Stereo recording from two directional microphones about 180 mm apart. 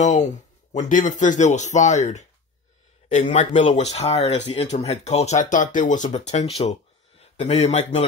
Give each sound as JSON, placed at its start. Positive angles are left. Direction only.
{"t": 0.0, "sound": "speech", "side_deg": 40}